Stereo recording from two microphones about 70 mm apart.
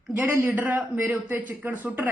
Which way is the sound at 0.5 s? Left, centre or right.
Right.